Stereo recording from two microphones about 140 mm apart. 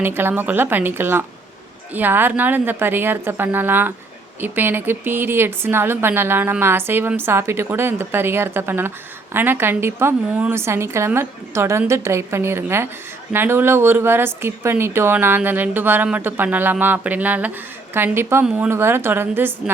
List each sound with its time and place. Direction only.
0.0 s speech: 15° right (ahead or behind)